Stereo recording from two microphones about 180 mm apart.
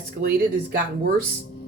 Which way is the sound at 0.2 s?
55° right (ahead or behind).